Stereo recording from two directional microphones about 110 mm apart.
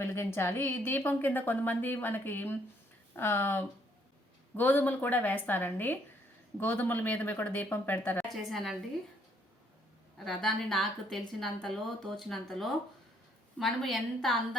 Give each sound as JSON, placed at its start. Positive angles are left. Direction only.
{"t": 0.0, "sound": "a woman's voice", "side_deg": 25}
{"t": 8.3, "sound": "speech", "side_deg": 0}
{"t": 10.2, "sound": "speech", "side_deg": 5}